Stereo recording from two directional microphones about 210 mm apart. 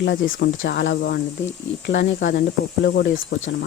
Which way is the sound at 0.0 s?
55° left (ahead or behind).